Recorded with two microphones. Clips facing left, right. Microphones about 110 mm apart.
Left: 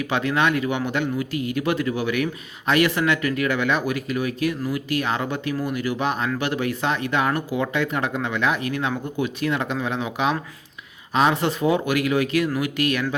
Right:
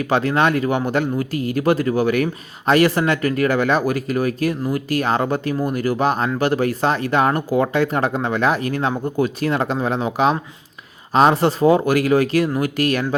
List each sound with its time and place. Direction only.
0.0 s speech: 40° right (ahead or behind)